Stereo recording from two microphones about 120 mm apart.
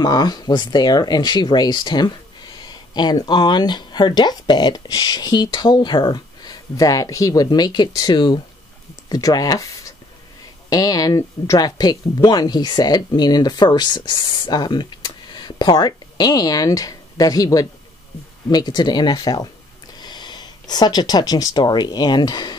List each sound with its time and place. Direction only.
0.0 s speech: 35° left (ahead or behind)